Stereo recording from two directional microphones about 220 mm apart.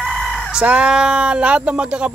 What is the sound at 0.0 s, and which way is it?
Speech, 5° left (ahead or behind).